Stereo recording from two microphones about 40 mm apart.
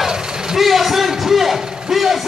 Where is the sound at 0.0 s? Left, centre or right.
Centre.